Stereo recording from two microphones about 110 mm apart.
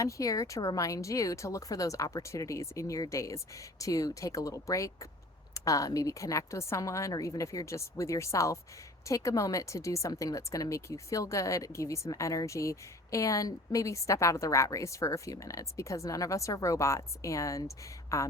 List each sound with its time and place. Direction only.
0.0 s speech: 30° left (ahead or behind)